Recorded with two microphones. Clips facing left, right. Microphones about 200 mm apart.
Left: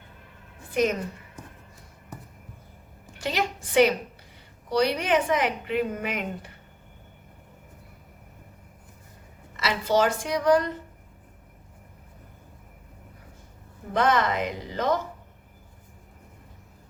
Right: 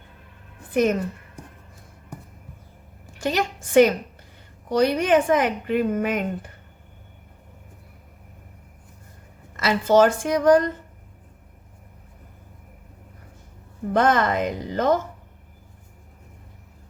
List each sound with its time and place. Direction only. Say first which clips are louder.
0.7 s a woman's voice: right 4 dB; 50° right (ahead or behind)
3.2 s a woman's voice: right 4 dB; 45° right (ahead or behind)
9.6 s a woman's voice: right 6 dB; 50° right (ahead or behind)
13.9 s a woman's voice: right 3 dB; 50° right (ahead or behind)